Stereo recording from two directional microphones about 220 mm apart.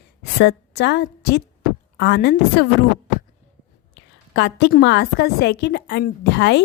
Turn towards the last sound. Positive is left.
turn(degrees=50)  # may be behind; listen again after turning